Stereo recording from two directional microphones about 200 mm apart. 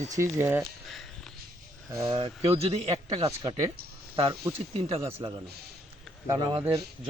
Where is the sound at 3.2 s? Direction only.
20° right (ahead or behind).